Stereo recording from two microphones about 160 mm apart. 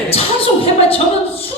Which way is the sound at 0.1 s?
35° left (ahead or behind).